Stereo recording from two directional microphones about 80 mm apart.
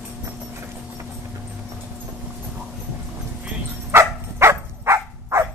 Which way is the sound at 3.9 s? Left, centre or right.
Right.